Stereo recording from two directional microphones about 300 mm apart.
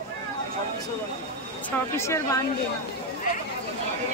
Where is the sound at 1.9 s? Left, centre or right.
Centre.